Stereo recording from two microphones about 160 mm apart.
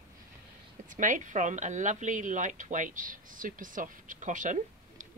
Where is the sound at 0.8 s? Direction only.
55° right (ahead or behind).